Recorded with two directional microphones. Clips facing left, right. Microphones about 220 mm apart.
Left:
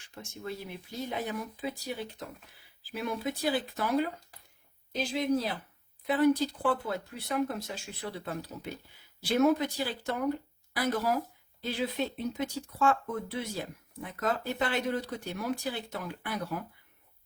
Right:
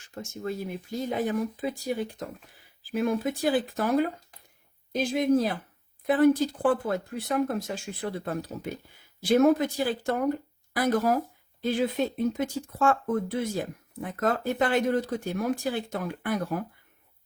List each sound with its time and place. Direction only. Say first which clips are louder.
0.0 s speech: right 7 dB; 45° right (ahead or behind)